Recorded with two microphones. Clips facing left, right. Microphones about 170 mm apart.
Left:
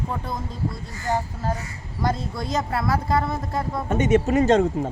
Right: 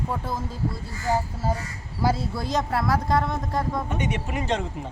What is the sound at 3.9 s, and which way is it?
Speech, 45° left (ahead or behind).